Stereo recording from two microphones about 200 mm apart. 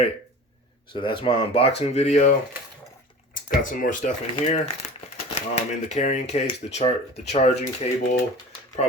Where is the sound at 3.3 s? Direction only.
45° left (ahead or behind).